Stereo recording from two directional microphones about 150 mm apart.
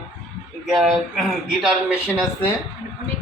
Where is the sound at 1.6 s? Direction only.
5° right (ahead or behind).